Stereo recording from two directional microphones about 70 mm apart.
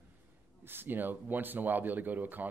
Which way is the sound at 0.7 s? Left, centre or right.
Right.